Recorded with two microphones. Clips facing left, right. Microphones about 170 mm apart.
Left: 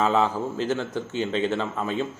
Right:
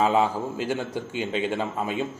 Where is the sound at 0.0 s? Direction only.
10° right (ahead or behind).